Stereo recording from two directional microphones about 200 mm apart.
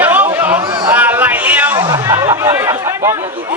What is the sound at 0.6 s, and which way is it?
Speech, 20° right (ahead or behind).